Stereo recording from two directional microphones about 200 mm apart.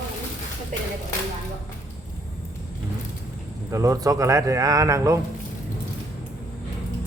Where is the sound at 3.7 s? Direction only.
15° right (ahead or behind).